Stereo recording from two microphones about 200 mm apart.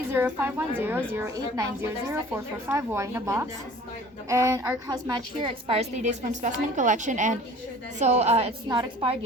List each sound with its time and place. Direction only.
0.1 s a woman's voice: 10° right (ahead or behind); by 9.1 s 30° right (ahead or behind)